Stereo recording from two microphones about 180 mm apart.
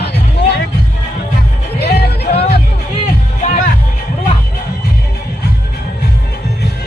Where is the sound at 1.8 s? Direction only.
60° left (ahead or behind).